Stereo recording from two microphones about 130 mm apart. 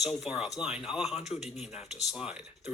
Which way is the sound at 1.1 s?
60° left (ahead or behind).